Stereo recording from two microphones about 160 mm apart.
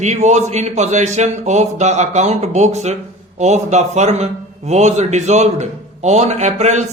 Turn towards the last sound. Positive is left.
turn(degrees=-45)  # may be behind; listen again after turning